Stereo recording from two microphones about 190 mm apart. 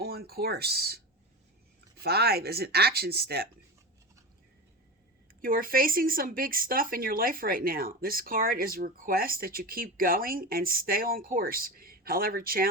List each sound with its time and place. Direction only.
0.0 s speech: 55° right (ahead or behind)
5.4 s speech: 50° right (ahead or behind)